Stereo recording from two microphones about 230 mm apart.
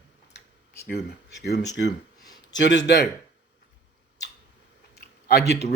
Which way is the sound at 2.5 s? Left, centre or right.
Left.